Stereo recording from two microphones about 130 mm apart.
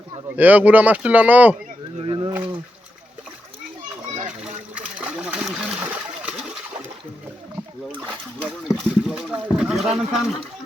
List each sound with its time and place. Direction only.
0.3 s speech: 10° right (ahead or behind)
2.0 s a sound: 40° right (ahead or behind)
4.1 s splash: 65° right (ahead or behind)
4.7 s splash: 10° right (ahead or behind)
8.4 s speech: 5° right (ahead or behind)